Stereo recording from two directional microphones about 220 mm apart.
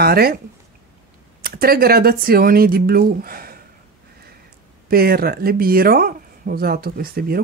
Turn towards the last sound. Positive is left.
turn(degrees=-45)  # may be behind; listen again after turning